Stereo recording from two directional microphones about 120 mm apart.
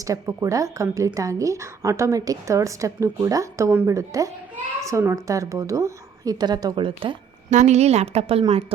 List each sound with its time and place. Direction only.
0.0 s a woman's voice: 25° right (ahead or behind); by 7.2 s 45° right (ahead or behind)
7.5 s a woman's voice: 70° right (ahead or behind); by 8.6 s 55° right (ahead or behind)